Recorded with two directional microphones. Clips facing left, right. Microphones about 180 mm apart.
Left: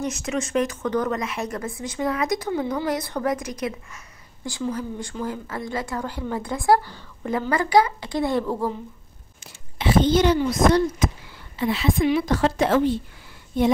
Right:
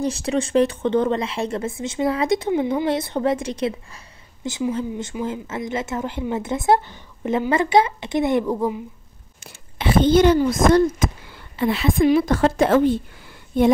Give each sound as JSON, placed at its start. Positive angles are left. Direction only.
{"t": 0.0, "sound": "a woman's voice", "side_deg": -30}
{"t": 9.4, "sound": "a woman's voice", "side_deg": -55}